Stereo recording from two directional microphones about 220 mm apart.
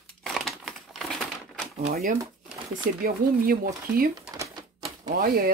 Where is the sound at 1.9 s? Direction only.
35° right (ahead or behind).